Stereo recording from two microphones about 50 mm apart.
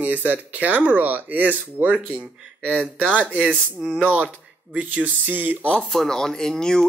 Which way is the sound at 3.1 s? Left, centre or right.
Right.